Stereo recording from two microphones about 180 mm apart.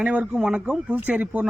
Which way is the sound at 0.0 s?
5° right (ahead or behind).